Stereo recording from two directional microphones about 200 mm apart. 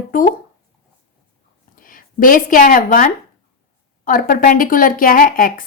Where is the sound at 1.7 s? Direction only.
45° left (ahead or behind).